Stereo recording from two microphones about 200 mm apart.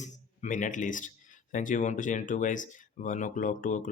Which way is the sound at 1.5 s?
40° left (ahead or behind).